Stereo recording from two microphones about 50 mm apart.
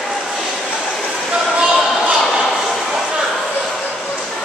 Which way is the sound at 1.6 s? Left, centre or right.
Right.